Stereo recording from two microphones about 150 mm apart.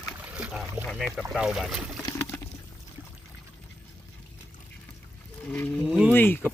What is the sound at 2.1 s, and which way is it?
Water, 10° left (ahead or behind).